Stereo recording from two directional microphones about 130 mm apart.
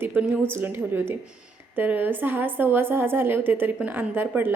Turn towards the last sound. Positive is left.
turn(degrees=-15)  # may be behind; listen again after turning